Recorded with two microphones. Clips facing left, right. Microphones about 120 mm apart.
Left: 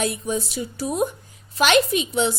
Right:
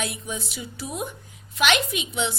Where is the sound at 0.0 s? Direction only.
40° left (ahead or behind).